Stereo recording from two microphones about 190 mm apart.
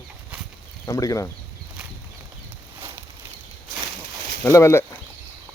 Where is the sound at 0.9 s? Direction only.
15° left (ahead or behind).